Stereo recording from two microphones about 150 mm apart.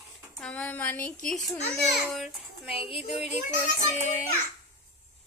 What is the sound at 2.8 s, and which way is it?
Speech, 40° left (ahead or behind).